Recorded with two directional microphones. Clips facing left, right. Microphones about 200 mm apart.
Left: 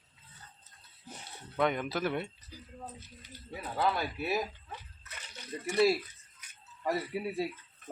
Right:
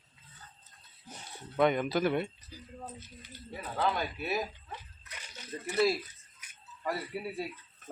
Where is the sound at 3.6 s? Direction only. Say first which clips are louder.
Even; 10° left (ahead or behind).